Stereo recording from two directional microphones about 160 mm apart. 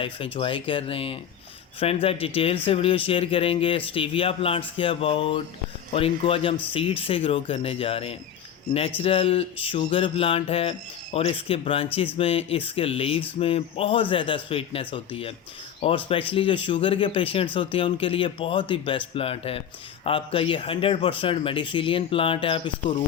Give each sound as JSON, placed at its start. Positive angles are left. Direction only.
{"t": 0.0, "sound": "speech", "side_deg": 30}